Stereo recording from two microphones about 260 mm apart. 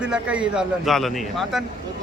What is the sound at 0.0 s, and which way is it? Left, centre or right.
A man's voice, centre.